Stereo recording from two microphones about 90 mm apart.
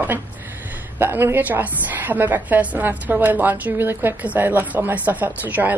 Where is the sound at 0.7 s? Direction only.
20° right (ahead or behind).